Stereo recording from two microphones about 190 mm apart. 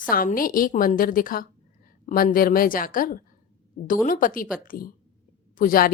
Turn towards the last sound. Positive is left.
turn(degrees=50)  # may be behind; listen again after turning